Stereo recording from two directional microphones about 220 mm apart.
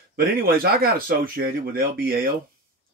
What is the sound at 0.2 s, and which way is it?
A man's voice, 40° right (ahead or behind).